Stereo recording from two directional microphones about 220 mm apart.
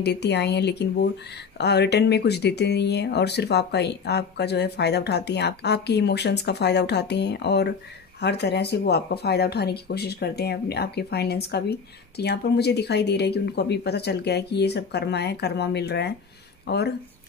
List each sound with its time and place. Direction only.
0.0 s speech: 50° left (ahead or behind)